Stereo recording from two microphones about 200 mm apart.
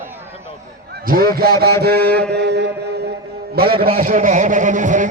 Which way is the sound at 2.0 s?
55° right (ahead or behind).